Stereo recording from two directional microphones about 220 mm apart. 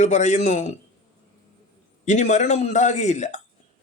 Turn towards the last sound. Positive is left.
turn(degrees=30)  # may be behind; listen again after turning